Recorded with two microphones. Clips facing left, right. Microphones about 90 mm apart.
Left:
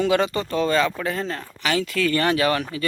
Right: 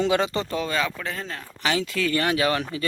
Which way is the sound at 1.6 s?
20° right (ahead or behind).